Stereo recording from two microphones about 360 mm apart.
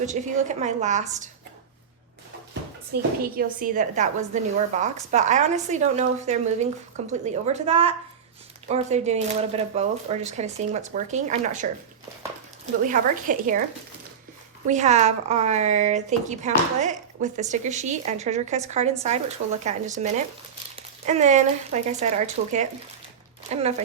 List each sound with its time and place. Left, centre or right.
0.0 s speech: centre
2.9 s speech: right
12.9 s speech: right
14.7 s speech: centre